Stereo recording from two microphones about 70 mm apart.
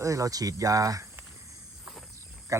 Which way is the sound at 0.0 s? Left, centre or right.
Right.